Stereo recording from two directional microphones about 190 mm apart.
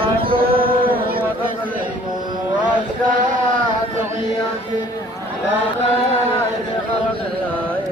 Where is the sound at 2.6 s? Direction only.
40° right (ahead or behind).